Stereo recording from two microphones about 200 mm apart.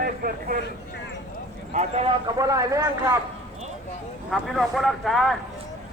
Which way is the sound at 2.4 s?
15° right (ahead or behind).